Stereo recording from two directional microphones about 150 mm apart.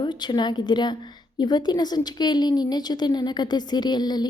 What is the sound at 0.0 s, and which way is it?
A woman's voice, 30° left (ahead or behind).